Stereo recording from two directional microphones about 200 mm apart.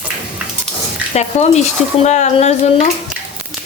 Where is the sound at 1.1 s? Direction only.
35° left (ahead or behind).